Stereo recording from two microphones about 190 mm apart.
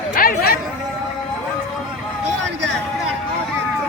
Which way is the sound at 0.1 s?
50° left (ahead or behind).